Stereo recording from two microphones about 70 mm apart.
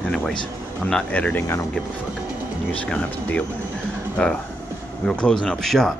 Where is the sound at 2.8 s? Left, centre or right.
Left.